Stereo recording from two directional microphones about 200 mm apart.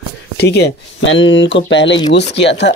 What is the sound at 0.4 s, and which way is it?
Speech, 55° left (ahead or behind).